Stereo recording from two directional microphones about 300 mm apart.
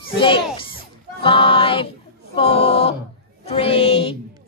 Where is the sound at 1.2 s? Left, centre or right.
Centre.